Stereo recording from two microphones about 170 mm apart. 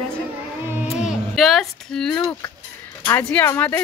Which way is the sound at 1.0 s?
Centre (ahead or behind).